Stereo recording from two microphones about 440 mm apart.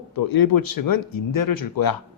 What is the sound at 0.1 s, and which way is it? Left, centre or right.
A man's voice, left.